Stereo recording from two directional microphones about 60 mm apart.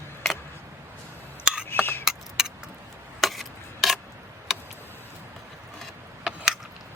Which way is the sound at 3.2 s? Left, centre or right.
Centre.